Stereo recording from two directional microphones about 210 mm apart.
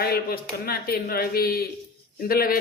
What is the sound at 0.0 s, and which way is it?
Speech, 45° left (ahead or behind).